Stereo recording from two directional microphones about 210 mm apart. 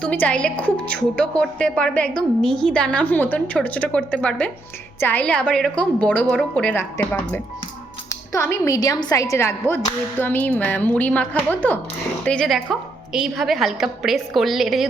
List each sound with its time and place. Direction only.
0.0 s a woman's voice: 5° left (ahead or behind)